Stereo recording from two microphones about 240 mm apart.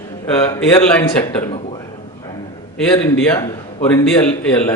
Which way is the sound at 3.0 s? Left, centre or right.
Centre.